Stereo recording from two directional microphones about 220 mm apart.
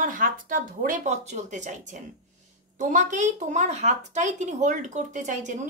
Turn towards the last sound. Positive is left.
turn(degrees=-35)  # may be behind; listen again after turning